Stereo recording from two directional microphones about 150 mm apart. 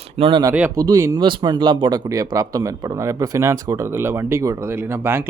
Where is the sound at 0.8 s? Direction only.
20° right (ahead or behind).